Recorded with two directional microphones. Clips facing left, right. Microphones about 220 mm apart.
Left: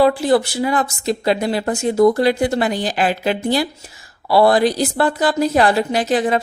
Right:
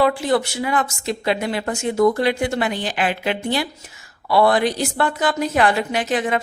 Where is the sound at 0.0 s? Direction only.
35° left (ahead or behind).